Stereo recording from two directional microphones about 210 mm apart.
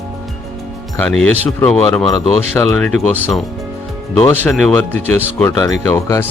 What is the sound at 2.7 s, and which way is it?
Speech, centre (ahead or behind).